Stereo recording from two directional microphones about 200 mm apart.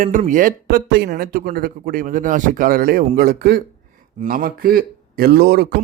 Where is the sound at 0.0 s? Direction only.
40° right (ahead or behind).